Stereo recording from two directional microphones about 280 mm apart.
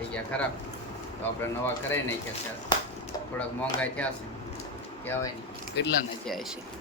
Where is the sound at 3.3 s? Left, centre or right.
Centre.